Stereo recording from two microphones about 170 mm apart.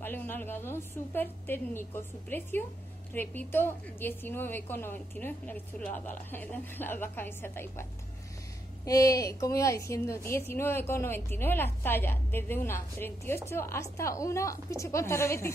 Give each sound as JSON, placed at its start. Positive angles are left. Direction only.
{"t": 0.0, "sound": "a woman's voice", "side_deg": 10}
{"t": 8.8, "sound": "a woman's voice", "side_deg": 20}